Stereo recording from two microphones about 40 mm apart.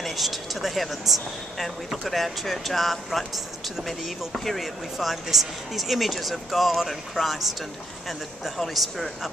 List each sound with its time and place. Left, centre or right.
0.0 s speech: centre
4.9 s speech: centre